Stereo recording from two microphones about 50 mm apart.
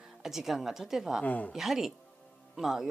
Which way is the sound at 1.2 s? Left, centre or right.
Left.